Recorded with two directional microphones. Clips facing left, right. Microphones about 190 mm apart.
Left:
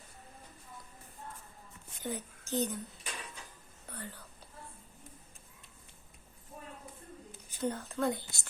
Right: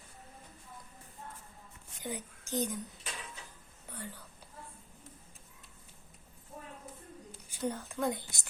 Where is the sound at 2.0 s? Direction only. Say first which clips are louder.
Left 2 dB; 15° right (ahead or behind).